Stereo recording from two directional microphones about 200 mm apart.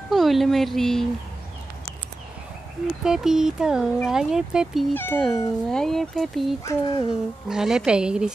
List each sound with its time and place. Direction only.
0.1 s speech: centre (ahead or behind)
3.0 s speech: 5° right (ahead or behind)
4.9 s speech: 10° left (ahead or behind)
6.6 s speech: 20° left (ahead or behind)
7.4 s speech: 5° right (ahead or behind)